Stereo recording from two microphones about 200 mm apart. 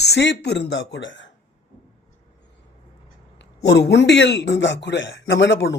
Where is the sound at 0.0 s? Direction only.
60° left (ahead or behind).